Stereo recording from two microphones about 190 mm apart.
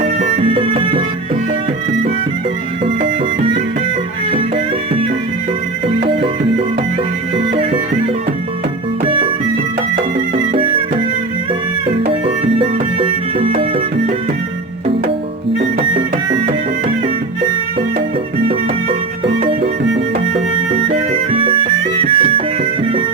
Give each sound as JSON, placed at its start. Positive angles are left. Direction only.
{"t": 0.0, "sound": "music", "side_deg": -30}
{"t": 2.8, "sound": "music", "side_deg": -30}
{"t": 9.0, "sound": "music", "side_deg": -25}
{"t": 10.5, "sound": "music", "side_deg": -30}
{"t": 12.2, "sound": "music", "side_deg": -30}
{"t": 20.3, "sound": "music", "side_deg": -30}